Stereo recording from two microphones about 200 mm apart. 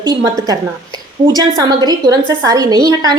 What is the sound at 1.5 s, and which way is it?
A woman's voice, 20° right (ahead or behind).